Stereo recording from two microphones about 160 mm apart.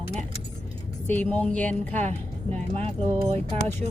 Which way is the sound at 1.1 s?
10° left (ahead or behind).